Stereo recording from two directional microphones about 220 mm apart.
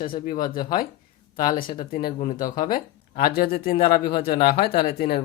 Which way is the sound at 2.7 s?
45° left (ahead or behind).